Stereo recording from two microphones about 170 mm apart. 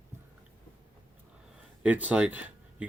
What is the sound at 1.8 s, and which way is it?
Speech, 5° right (ahead or behind).